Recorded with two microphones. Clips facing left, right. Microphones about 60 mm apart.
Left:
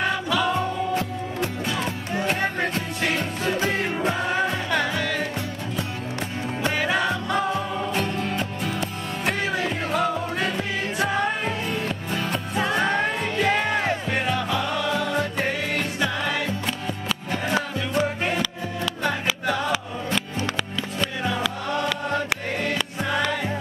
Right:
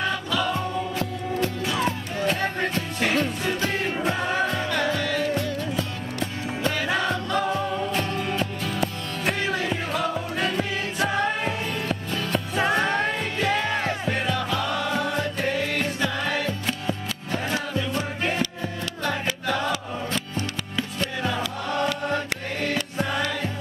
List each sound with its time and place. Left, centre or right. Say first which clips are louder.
2.1 s music: left 3 dB; left
3.9 s music: left 1 dB; centre
4.4 s music: left 1 dB; centre
12.7 s music: left 1 dB; centre
13.5 s music: left 2 dB; centre
17.3 s music: left 1 dB; left
19.0 s music: left 1 dB; centre